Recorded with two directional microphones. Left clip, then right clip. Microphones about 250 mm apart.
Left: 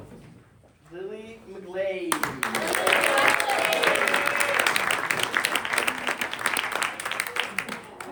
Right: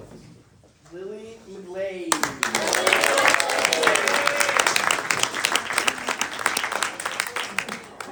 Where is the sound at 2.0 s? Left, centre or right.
Right.